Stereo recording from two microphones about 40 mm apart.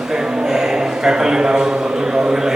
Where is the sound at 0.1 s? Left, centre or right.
Centre.